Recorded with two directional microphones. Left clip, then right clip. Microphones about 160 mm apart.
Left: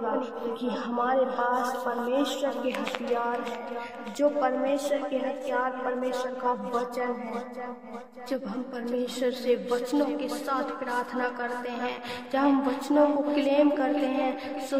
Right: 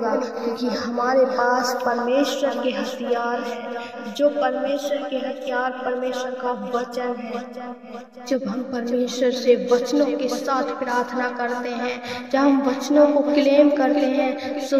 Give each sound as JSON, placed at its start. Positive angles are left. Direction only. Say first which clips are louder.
{"t": 0.7, "sound": "a woman's voice", "louder": "right 4 dB", "side_deg": -25}
{"t": 4.2, "sound": "a man's voice", "louder": "right 5 dB", "side_deg": -10}
{"t": 5.1, "sound": "a man's voice", "louder": "right 4 dB", "side_deg": -15}
{"t": 8.3, "sound": "a woman's voice", "louder": "right 8 dB", "side_deg": -40}
{"t": 14.0, "sound": "music", "louder": "right 7 dB", "side_deg": 25}
{"t": 14.7, "sound": "a woman's voice", "louder": "right 8 dB", "side_deg": -30}